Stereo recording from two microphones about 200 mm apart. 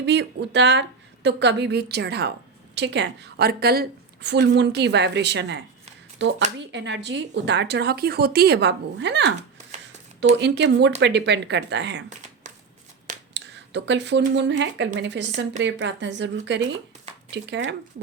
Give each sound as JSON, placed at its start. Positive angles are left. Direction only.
{"t": 0.0, "sound": "a woman's voice", "side_deg": -60}
{"t": 10.3, "sound": "a woman's voice", "side_deg": -60}
{"t": 13.3, "sound": "a sound", "side_deg": -60}
{"t": 14.3, "sound": "a woman's voice", "side_deg": -65}